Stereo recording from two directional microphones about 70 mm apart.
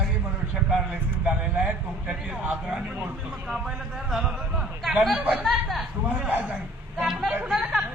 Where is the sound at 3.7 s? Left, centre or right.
Centre.